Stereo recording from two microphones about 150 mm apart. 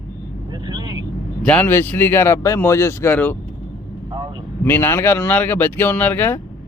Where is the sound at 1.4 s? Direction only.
10° left (ahead or behind).